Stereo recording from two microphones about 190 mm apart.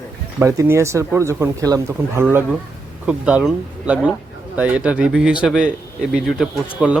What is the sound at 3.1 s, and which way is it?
A man's voice, 5° right (ahead or behind).